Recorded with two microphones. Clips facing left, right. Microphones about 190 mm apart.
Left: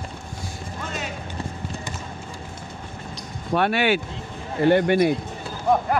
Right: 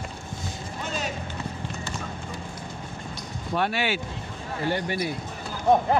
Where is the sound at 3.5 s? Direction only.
60° left (ahead or behind).